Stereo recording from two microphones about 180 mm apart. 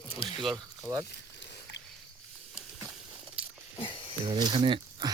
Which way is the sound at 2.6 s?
10° right (ahead or behind).